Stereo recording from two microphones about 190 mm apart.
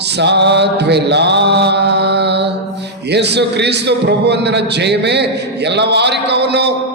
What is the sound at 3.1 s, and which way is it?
A man's voice, 60° right (ahead or behind).